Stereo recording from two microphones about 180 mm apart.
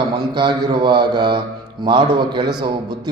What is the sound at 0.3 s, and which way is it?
Speech, 25° right (ahead or behind).